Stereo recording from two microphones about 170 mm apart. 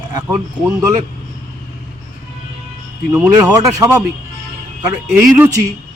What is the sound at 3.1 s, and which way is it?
Speech, 20° right (ahead or behind).